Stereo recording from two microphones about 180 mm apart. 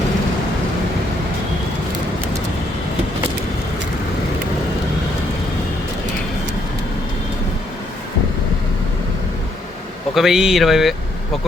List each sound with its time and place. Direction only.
10.2 s speech: 5° right (ahead or behind)